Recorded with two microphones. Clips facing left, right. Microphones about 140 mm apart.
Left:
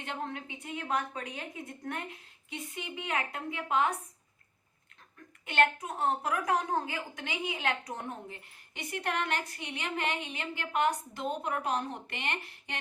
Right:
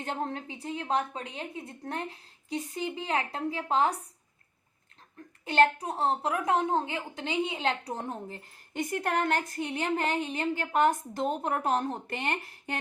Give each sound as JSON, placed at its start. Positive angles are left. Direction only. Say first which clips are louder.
{"t": 0.0, "sound": "a woman's voice", "louder": "right 4 dB", "side_deg": -35}
{"t": 5.5, "sound": "a woman's voice", "louder": "right 4 dB", "side_deg": -35}
{"t": 8.7, "sound": "speech", "louder": "right 5 dB", "side_deg": -45}